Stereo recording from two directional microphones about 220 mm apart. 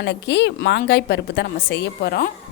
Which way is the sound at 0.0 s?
50° left (ahead or behind).